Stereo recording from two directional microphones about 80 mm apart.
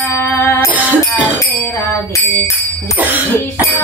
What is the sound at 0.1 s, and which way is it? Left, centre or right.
Music, left.